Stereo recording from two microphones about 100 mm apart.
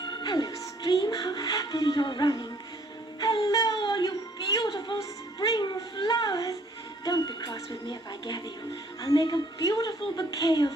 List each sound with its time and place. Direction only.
0.2 s speech: 45° left (ahead or behind)
3.2 s music: 40° left (ahead or behind)
4.5 s speech: 40° left (ahead or behind)